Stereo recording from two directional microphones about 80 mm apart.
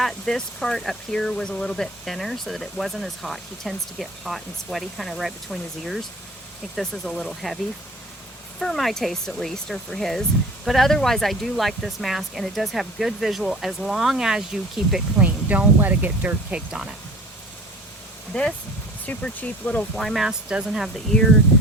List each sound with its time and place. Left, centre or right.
0.0 s speech: centre
15.2 s speech: centre
18.3 s speech: centre
20.0 s speech: centre
20.2 s speech: centre
20.8 s speech: centre